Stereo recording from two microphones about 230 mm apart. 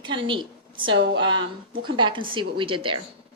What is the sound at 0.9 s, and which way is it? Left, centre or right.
Speech, right.